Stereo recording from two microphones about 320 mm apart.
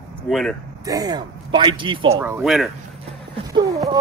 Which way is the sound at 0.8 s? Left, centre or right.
Centre.